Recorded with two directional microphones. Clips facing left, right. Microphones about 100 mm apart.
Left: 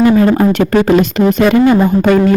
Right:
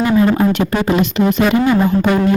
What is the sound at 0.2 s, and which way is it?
Speech, 50° left (ahead or behind).